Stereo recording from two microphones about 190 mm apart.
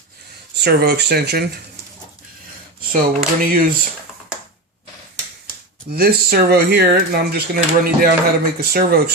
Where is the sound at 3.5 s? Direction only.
45° right (ahead or behind).